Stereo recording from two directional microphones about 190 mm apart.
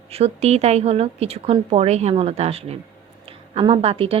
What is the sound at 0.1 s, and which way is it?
A woman's voice, 35° right (ahead or behind).